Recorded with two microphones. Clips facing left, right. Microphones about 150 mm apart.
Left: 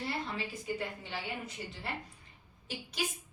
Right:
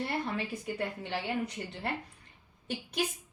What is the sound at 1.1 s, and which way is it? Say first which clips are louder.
A woman's voice: right 6 dB; 65° right (ahead or behind).